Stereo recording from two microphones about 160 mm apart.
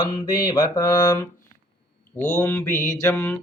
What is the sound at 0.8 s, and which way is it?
Speech, 25° left (ahead or behind).